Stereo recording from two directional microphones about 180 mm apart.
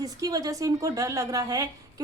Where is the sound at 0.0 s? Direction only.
20° right (ahead or behind).